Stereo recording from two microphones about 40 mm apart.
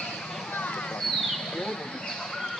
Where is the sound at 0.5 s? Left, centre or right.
Left.